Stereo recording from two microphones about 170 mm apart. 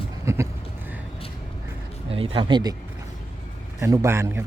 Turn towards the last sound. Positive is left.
turn(degrees=-15)  # may be behind; listen again after turning